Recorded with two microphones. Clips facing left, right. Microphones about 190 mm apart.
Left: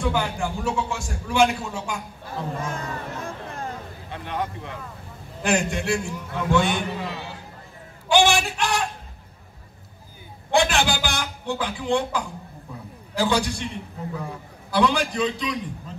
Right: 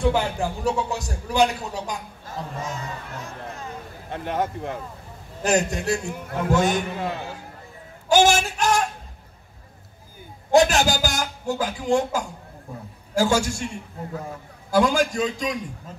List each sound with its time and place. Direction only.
0.1 s a man's voice: 35° right (ahead or behind)
2.6 s a sound: 55° left (ahead or behind)
4.1 s a man's voice: 45° right (ahead or behind)
8.1 s a sound: 45° right (ahead or behind)
10.5 s a man's voice: 40° right (ahead or behind)
14.7 s a man's voice: 45° right (ahead or behind)